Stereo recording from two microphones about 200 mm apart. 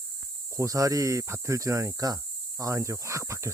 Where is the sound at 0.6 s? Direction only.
15° right (ahead or behind).